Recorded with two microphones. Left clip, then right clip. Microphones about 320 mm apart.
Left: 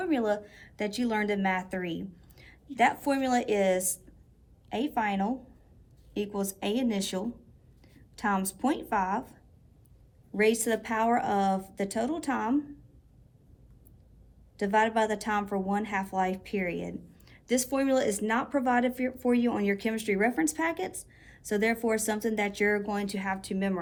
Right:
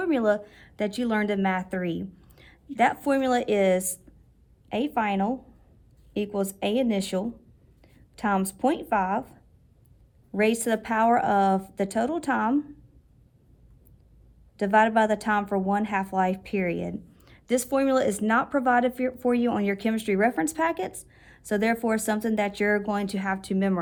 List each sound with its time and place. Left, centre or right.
0.0 s a woman's voice: right
14.5 s a woman's voice: right